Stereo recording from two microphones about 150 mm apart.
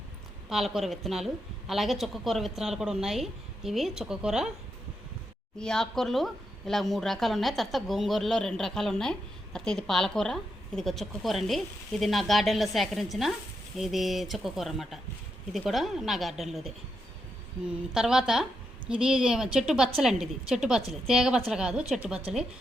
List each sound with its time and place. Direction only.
0.5 s a woman's voice: centre (ahead or behind)
5.5 s a woman's voice: 5° left (ahead or behind)